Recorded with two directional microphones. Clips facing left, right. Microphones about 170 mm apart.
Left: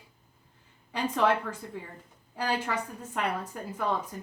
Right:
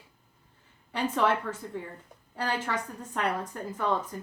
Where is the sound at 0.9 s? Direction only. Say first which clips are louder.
Even; 10° left (ahead or behind).